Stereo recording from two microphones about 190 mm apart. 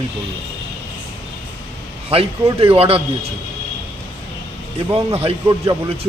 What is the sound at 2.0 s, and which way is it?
Speech, 30° right (ahead or behind).